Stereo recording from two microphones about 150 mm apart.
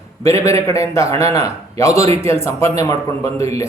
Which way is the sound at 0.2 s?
20° left (ahead or behind).